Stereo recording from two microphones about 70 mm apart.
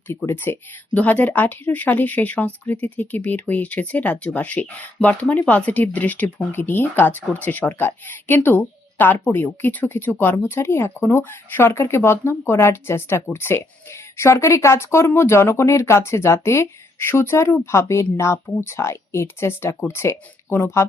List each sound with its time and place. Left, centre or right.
0.4 s speech: left